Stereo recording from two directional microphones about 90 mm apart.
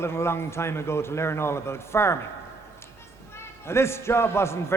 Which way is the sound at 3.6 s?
30° left (ahead or behind).